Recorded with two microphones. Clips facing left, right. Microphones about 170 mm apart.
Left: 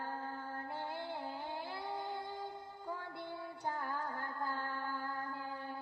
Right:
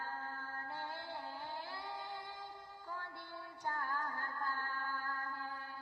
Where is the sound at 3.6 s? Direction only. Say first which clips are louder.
Left 1 dB; 20° left (ahead or behind).